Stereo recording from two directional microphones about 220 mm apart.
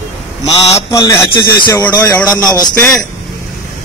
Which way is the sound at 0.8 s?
15° left (ahead or behind).